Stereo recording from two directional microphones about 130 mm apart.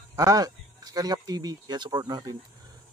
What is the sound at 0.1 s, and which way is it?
Speech, 30° right (ahead or behind).